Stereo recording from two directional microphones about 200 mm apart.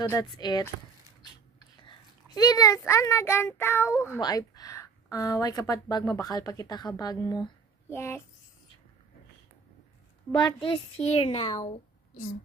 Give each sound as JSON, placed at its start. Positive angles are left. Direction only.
{"t": 0.0, "sound": "speech", "side_deg": 15}
{"t": 2.3, "sound": "a child's voice", "side_deg": 20}
{"t": 10.3, "sound": "speech", "side_deg": 25}